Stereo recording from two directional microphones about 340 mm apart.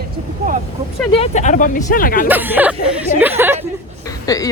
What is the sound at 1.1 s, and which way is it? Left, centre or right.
Speech, centre.